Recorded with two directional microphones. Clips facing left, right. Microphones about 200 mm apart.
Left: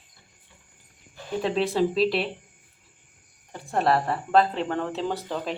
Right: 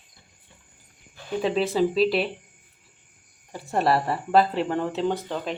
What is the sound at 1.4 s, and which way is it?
Speech, centre (ahead or behind).